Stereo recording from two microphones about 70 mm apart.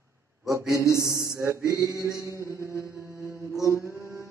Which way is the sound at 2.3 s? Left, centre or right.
Right.